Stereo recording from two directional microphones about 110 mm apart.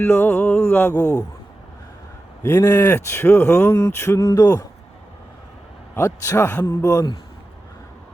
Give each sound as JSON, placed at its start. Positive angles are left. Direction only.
{"t": 0.0, "sound": "speech", "side_deg": 20}
{"t": 2.4, "sound": "speech", "side_deg": 25}
{"t": 6.0, "sound": "speech", "side_deg": 25}
{"t": 6.8, "sound": "speech", "side_deg": 35}